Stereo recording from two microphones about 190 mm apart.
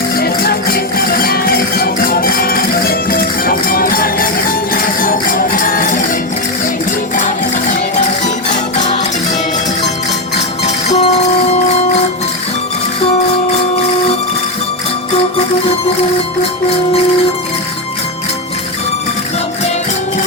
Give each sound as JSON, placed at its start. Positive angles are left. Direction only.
{"t": 0.2, "sound": "music", "side_deg": 55}
{"t": 8.2, "sound": "music", "side_deg": 40}
{"t": 10.8, "sound": "music", "side_deg": 35}